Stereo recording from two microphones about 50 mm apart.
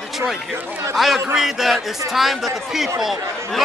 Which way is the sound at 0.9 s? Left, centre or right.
Centre.